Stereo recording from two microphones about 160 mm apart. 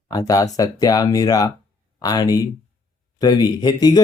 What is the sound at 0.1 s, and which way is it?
Speech, 25° left (ahead or behind).